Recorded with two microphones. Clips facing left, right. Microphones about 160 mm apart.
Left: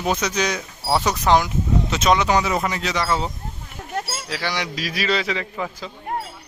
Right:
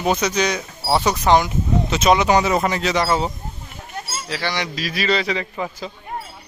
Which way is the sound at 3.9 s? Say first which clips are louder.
Left 4 dB; 65° left (ahead or behind).